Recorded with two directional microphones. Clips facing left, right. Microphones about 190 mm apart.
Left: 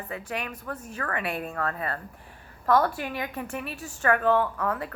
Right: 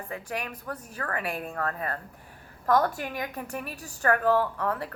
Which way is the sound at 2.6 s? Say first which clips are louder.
Left 1 dB; 45° right (ahead or behind).